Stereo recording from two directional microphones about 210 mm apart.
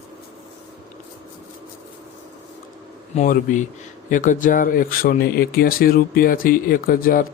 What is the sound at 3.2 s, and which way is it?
Speech, 35° left (ahead or behind).